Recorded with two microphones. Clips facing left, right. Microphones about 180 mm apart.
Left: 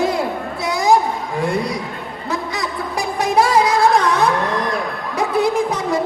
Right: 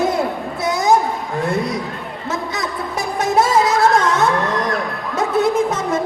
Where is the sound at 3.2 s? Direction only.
20° right (ahead or behind).